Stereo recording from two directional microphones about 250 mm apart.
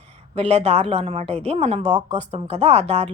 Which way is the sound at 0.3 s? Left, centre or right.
Right.